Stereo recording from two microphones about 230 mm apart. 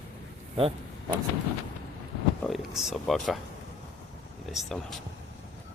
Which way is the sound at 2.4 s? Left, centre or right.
Centre.